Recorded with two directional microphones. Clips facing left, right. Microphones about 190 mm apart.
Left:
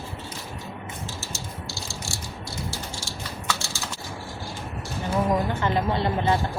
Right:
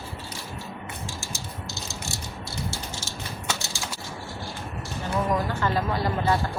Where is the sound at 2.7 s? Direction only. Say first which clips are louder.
Even; 25° right (ahead or behind).